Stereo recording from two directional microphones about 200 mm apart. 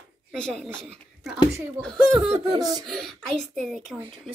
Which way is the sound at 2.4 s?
20° right (ahead or behind).